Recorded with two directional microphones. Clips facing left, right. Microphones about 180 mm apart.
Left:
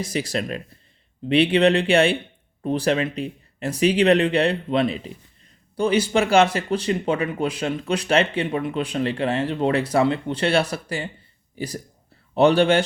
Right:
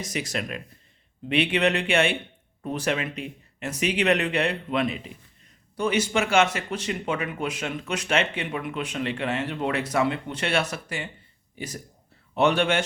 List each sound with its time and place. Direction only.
0.0 s speech: 30° left (ahead or behind)